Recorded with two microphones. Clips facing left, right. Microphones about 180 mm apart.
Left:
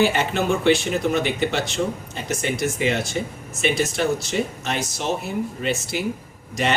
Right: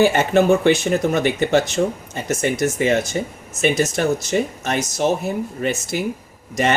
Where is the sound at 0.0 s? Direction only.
50° right (ahead or behind).